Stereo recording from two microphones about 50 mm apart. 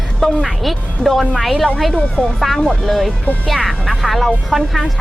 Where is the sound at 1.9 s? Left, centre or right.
Centre.